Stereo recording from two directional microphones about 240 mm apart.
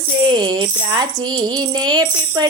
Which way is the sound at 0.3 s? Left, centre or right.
Centre.